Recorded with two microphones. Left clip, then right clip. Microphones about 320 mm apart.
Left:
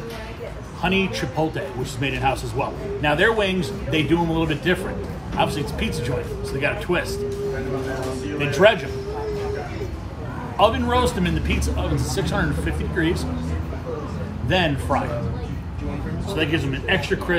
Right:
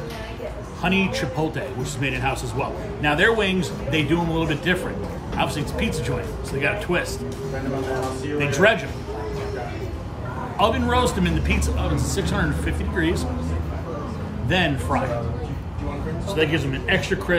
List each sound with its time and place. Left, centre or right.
0.8 s a man's voice: centre
8.4 s a man's voice: centre
10.6 s a man's voice: centre
14.5 s a man's voice: centre
16.3 s a man's voice: centre